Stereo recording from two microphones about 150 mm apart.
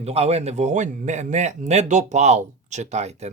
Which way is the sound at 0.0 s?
45° right (ahead or behind).